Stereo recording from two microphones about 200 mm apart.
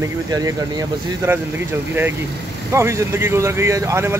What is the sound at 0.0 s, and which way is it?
Speech, 15° right (ahead or behind).